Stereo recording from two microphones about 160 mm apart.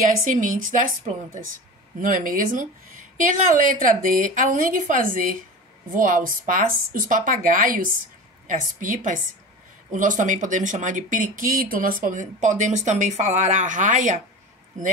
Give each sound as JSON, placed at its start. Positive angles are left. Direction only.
{"t": 0.2, "sound": "a woman's voice", "side_deg": -55}